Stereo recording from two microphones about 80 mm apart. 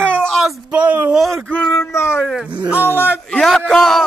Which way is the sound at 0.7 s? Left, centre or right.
Centre.